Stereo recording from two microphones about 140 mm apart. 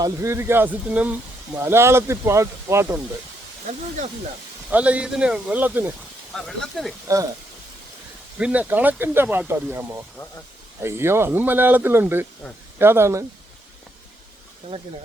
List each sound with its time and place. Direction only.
0.0 s speech: 20° right (ahead or behind)
4.7 s speech: 10° right (ahead or behind)
6.3 s speech: 5° left (ahead or behind)
8.4 s speech: 10° right (ahead or behind)